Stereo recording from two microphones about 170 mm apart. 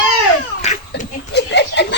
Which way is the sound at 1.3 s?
85° left.